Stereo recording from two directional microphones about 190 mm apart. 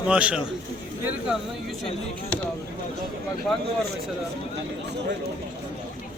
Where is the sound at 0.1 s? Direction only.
5° right (ahead or behind).